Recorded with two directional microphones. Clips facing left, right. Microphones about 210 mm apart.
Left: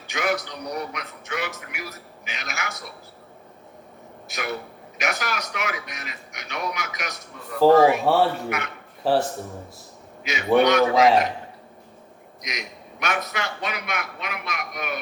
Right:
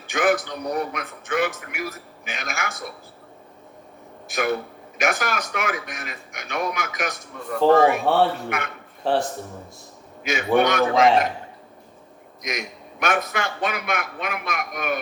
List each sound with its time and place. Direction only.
0.1 s speech: 50° right (ahead or behind)
4.3 s speech: 50° right (ahead or behind)
8.0 s speech: centre (ahead or behind)
8.4 s speech: 50° right (ahead or behind)
9.0 s speech: 5° left (ahead or behind)
10.2 s speech: 50° right (ahead or behind)
12.4 s speech: 50° right (ahead or behind)